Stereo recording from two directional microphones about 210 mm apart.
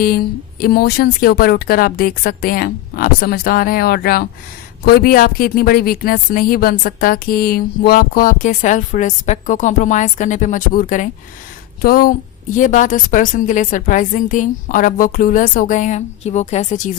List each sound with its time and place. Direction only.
0.6 s a woman's voice: 45° left (ahead or behind)